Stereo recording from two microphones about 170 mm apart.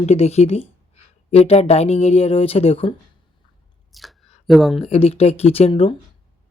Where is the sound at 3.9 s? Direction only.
Centre (ahead or behind).